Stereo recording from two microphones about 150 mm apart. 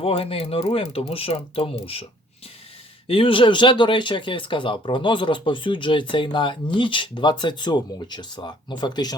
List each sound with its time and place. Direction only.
0.0 s speech: 40° left (ahead or behind)
3.1 s speech: 35° left (ahead or behind)